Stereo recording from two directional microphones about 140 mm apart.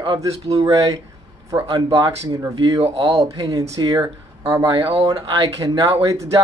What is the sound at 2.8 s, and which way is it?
Speech, 50° right (ahead or behind).